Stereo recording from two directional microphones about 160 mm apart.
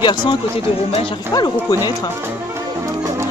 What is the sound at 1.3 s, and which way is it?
Speech, 25° left (ahead or behind).